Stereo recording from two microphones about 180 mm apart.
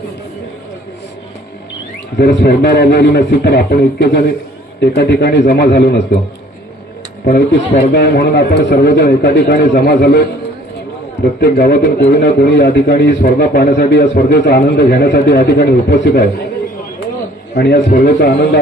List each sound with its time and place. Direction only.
2.1 s a man's voice: 65° left (ahead or behind)
7.3 s speech: 50° left (ahead or behind)
8.0 s a man's voice: 65° left (ahead or behind)
11.3 s a man's voice: 60° left (ahead or behind)
17.5 s a man's voice: 65° left (ahead or behind)